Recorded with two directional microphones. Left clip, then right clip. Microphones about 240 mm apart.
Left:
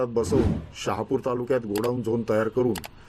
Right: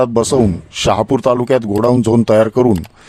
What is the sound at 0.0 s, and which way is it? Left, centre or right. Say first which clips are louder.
Speech: right 11 dB; right.